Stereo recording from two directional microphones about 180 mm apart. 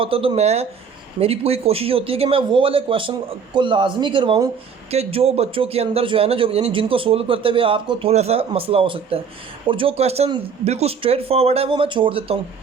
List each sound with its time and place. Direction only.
0.0 s a man's voice: 30° right (ahead or behind)